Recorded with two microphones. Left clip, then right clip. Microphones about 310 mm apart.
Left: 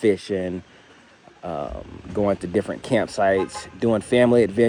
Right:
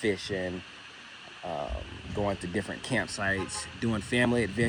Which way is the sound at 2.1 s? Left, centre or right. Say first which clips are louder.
Left 10 dB; left.